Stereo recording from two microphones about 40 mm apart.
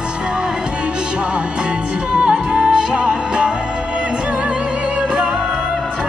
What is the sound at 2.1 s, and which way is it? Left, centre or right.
Music, right.